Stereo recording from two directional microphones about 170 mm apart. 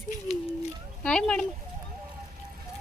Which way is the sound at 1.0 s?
5° left (ahead or behind).